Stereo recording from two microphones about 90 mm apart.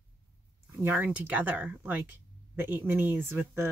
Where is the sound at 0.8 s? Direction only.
25° right (ahead or behind).